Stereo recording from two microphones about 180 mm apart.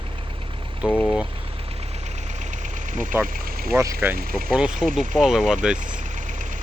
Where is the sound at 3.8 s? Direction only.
15° right (ahead or behind).